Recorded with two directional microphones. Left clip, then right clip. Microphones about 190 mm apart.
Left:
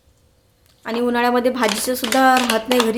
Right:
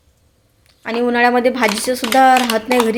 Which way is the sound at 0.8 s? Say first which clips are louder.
Right 4 dB; centre (ahead or behind).